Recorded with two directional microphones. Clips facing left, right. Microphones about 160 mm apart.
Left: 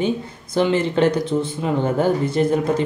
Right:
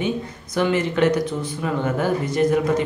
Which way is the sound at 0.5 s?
30° left (ahead or behind).